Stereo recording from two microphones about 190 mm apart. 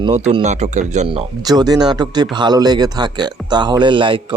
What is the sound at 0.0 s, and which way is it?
A man's voice, 30° right (ahead or behind).